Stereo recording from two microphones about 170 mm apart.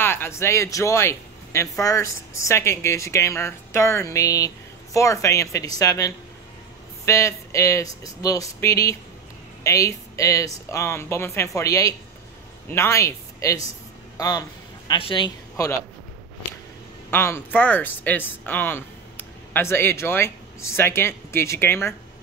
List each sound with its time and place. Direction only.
0.0 s a man's voice: 15° left (ahead or behind)
17.1 s speech: 15° left (ahead or behind)